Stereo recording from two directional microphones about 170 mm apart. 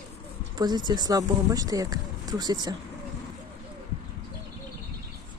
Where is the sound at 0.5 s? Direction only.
25° right (ahead or behind).